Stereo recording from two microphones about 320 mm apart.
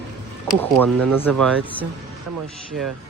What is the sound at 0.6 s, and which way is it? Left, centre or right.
Speech, centre.